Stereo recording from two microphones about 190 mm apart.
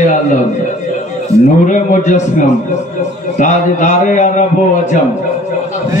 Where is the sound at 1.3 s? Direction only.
15° right (ahead or behind).